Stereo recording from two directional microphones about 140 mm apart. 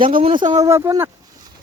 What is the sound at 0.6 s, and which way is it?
Speech, 20° right (ahead or behind).